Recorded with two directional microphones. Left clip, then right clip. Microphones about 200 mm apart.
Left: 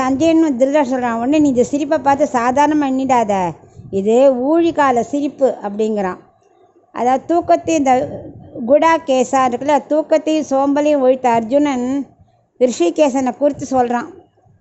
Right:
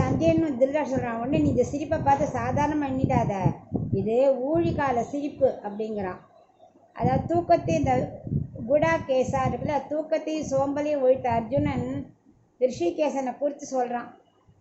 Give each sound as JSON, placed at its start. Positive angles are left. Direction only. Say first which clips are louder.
{"t": 0.0, "sound": "a woman's voice", "louder": "left 10 dB", "side_deg": 60}